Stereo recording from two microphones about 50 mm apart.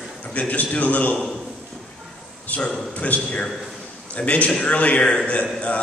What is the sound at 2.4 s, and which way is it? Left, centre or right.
A man's voice, left.